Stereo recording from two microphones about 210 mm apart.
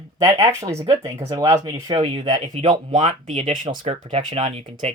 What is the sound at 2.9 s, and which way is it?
Speech, 35° right (ahead or behind).